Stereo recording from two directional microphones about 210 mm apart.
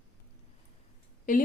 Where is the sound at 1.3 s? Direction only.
35° left (ahead or behind).